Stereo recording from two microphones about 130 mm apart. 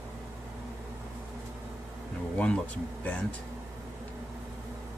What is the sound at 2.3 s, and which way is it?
Speech, 10° left (ahead or behind).